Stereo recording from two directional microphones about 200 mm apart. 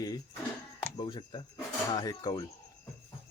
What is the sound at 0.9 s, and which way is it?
Speech, 20° left (ahead or behind).